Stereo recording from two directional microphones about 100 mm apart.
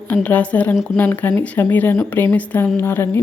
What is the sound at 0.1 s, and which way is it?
Speech, 15° left (ahead or behind).